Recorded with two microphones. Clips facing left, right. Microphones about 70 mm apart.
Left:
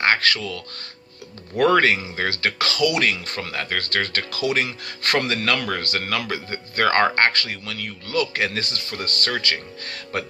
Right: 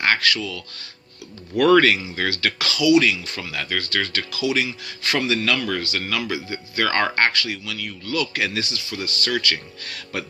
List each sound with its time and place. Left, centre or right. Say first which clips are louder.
0.0 s speech: left 1 dB; left
1.5 s speech: right 2 dB; left
9.4 s speech: even; left